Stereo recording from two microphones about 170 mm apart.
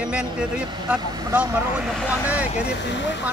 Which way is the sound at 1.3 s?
10° right (ahead or behind).